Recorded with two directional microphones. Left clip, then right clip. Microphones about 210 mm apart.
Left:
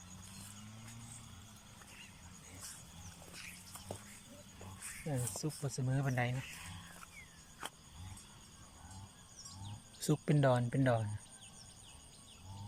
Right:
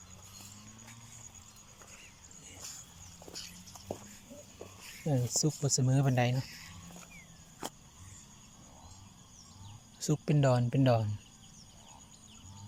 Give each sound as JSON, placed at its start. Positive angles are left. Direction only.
{"t": 3.9, "sound": "a sound", "side_deg": -15}
{"t": 5.0, "sound": "speech", "side_deg": -15}
{"t": 10.0, "sound": "speech", "side_deg": 0}